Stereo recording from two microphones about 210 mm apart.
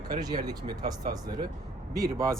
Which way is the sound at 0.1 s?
20° right (ahead or behind).